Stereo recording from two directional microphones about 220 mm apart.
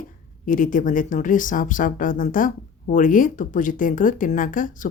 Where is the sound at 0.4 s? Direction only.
35° left (ahead or behind).